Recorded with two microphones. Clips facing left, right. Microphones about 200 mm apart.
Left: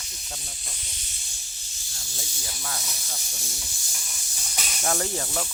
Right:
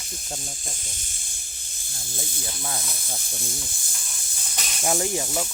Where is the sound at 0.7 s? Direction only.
50° right (ahead or behind).